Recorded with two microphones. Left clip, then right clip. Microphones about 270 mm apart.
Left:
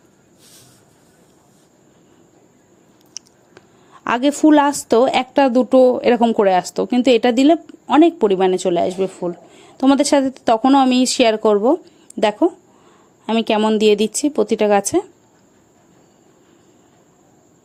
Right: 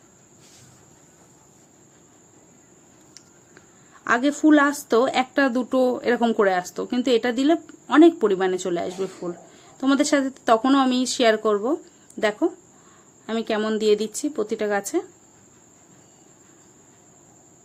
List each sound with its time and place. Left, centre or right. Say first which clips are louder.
4.0 s speech: left 4 dB; left